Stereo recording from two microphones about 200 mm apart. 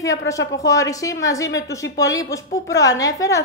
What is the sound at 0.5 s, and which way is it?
A woman's voice, 15° left (ahead or behind).